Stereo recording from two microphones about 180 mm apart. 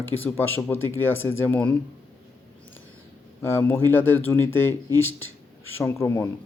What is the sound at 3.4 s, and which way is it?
Speech, 10° left (ahead or behind).